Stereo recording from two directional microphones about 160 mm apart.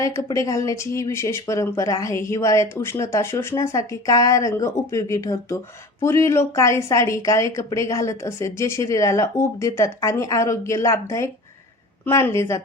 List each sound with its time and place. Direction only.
0.0 s speech: 20° left (ahead or behind)